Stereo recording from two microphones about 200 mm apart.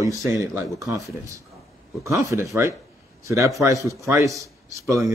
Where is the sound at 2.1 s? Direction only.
15° right (ahead or behind).